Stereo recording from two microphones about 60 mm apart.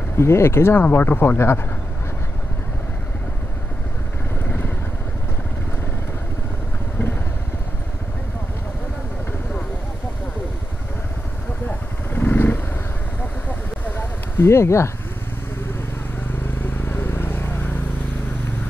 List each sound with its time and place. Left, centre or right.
0.2 s speech: left
0.8 s speech: left
4.5 s vehicle: left
11.6 s vehicle: left
13.8 s a sound: left
16.6 s vehicle: left